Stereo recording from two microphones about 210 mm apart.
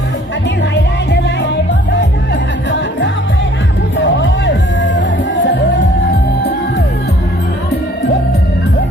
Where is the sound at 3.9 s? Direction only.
60° left (ahead or behind).